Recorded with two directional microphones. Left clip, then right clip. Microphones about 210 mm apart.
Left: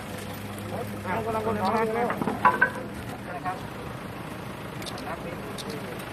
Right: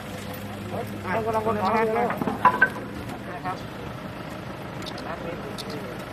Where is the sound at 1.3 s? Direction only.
25° right (ahead or behind).